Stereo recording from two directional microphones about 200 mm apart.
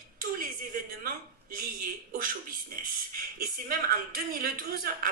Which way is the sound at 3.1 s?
50° right (ahead or behind).